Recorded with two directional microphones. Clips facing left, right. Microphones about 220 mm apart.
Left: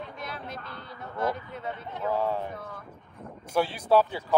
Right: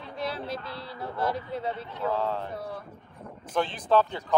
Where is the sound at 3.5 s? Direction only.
10° left (ahead or behind).